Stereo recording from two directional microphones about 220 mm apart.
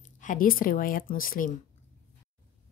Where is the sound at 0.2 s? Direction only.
35° left (ahead or behind).